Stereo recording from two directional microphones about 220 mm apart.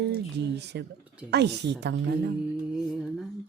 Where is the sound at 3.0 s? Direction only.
Centre (ahead or behind).